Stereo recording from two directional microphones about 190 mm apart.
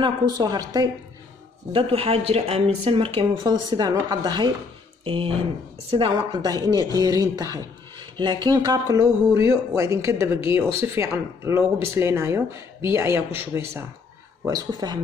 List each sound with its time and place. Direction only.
0.0 s speech: 20° right (ahead or behind)
14.4 s speech: 20° right (ahead or behind)